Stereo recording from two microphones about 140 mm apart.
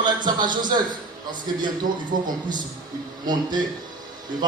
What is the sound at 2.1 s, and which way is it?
Speech, 80° right.